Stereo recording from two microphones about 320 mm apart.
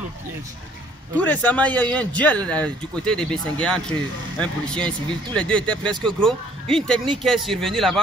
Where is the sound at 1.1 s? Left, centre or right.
Centre.